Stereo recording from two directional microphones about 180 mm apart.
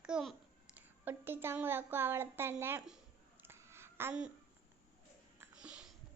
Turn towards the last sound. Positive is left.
turn(degrees=-5)  # may be behind; listen again after turning